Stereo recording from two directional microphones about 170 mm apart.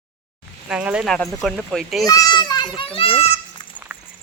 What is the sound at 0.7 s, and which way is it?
Speech, 5° right (ahead or behind).